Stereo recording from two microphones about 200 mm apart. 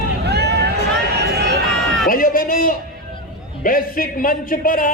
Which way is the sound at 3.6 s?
45° left (ahead or behind).